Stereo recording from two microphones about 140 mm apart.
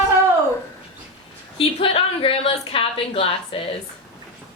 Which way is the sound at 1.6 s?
40° left (ahead or behind).